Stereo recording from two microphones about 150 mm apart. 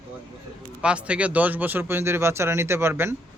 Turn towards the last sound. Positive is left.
turn(degrees=-15)  # may be behind; listen again after turning